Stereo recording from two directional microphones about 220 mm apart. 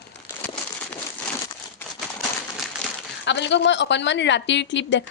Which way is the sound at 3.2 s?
55° left (ahead or behind).